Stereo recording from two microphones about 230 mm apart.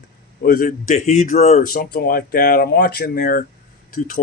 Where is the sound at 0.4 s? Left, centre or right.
Left.